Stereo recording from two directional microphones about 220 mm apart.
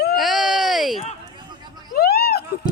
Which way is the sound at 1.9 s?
45° left (ahead or behind).